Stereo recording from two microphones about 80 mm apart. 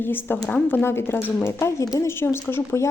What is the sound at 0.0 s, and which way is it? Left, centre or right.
A woman's voice, left.